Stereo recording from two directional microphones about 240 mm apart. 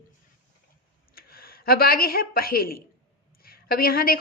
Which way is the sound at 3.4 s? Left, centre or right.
Left.